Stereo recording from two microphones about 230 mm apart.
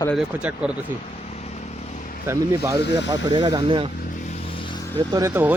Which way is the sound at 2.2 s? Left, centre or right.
Centre.